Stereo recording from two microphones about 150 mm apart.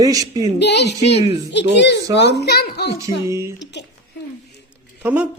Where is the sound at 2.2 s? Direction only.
90° left.